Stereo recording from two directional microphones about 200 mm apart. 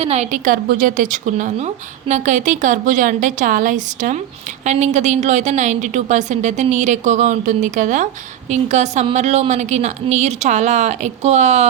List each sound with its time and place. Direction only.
0.0 s a woman's voice: 35° right (ahead or behind)